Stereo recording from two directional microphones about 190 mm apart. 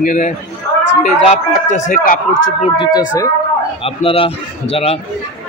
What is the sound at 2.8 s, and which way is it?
A man's voice, 20° left (ahead or behind).